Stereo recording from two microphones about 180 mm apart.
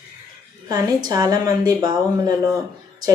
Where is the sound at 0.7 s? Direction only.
20° right (ahead or behind).